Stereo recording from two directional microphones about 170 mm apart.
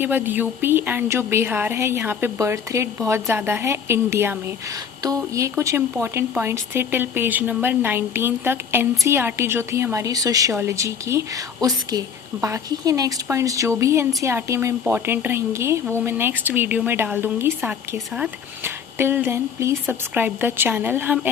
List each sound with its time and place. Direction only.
0.0 s a woman's voice: 10° right (ahead or behind)